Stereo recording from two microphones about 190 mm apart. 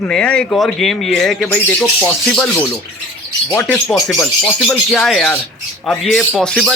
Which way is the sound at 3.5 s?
5° left (ahead or behind).